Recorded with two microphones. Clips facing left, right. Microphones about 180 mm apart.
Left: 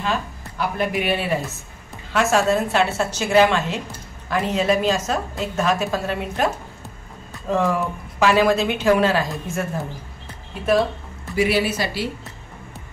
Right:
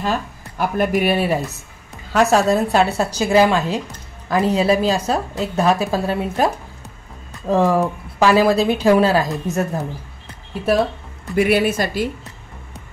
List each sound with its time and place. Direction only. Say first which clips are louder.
0.0 s speech: right 2 dB; 45° right (ahead or behind)
11.3 s speech: right 4 dB; 55° right (ahead or behind)